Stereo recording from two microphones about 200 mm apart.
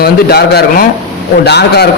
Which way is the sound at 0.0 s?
50° left (ahead or behind).